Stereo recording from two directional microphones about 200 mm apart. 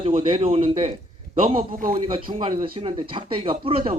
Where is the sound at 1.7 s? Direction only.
40° right (ahead or behind).